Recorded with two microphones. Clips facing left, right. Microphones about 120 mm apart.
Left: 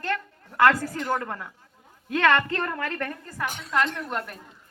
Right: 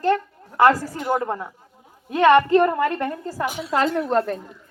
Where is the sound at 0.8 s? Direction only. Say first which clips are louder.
Right 5 dB; 10° right (ahead or behind).